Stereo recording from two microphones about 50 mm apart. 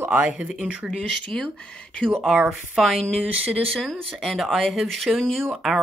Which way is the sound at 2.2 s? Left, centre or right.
Centre.